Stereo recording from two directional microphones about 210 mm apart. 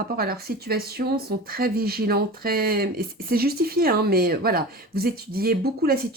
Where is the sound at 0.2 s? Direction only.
45° right (ahead or behind).